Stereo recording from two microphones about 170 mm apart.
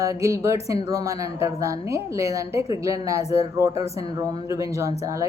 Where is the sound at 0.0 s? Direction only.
20° right (ahead or behind).